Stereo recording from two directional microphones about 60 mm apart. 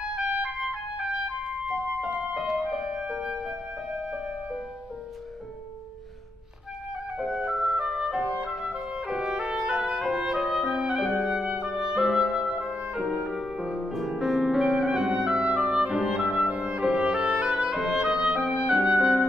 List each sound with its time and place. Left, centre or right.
0.4 s music: centre
7.2 s music: centre
9.5 s clarinet: centre
13.0 s music: centre
15.1 s clarinet: centre
16.5 s music: centre